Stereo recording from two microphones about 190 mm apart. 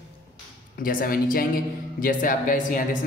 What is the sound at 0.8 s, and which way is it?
Speech, 50° left (ahead or behind).